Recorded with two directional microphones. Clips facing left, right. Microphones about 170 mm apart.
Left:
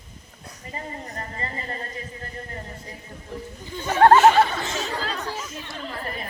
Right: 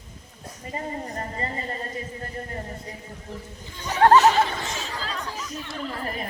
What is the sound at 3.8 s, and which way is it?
Speech, 40° left (ahead or behind).